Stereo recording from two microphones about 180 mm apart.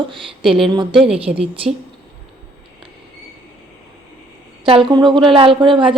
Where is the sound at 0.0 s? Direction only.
30° right (ahead or behind).